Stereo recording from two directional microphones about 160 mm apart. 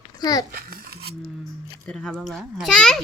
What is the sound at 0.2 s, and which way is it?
Speech, 25° left (ahead or behind).